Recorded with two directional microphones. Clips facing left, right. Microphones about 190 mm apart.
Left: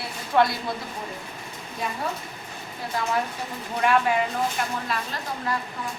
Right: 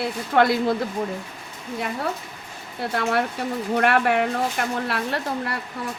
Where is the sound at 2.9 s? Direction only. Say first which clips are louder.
Right 3 dB; 65° right (ahead or behind).